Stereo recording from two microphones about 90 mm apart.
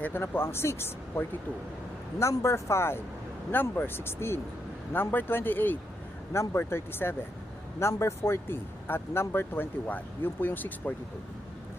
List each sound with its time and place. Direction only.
0.0 s speech: 25° left (ahead or behind)
2.3 s speech: 30° left (ahead or behind)